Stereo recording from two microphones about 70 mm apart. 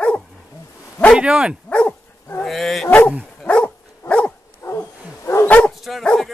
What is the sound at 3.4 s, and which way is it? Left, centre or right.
Dog, centre.